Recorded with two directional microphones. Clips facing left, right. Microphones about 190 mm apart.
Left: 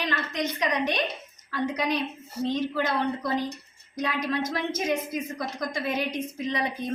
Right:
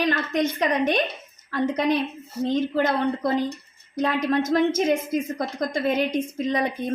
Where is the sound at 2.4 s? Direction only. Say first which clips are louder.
Right 5 dB; 50° right (ahead or behind).